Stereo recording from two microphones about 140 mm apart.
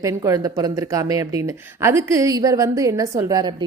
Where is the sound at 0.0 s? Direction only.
20° right (ahead or behind).